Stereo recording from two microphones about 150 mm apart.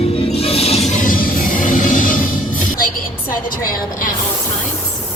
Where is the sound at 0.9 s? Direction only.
65° left (ahead or behind).